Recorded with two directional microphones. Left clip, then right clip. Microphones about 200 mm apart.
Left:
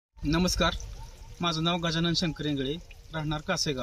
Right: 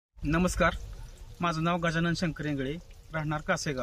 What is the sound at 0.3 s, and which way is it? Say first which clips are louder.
Speech: left 1 dB; 15° right (ahead or behind).